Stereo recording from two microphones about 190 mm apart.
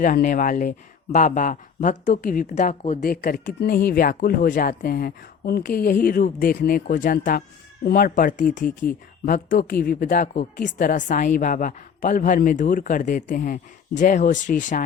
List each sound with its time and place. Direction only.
0.0 s speech: 45° left (ahead or behind)